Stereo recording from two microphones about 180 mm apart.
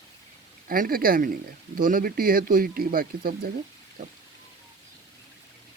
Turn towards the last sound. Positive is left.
turn(degrees=-45)  # may be behind; listen again after turning